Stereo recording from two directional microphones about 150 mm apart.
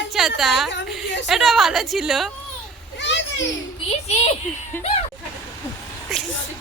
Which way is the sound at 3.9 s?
45° left (ahead or behind).